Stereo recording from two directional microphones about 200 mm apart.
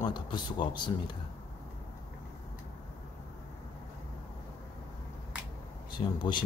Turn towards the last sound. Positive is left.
turn(degrees=25)  # may be behind; listen again after turning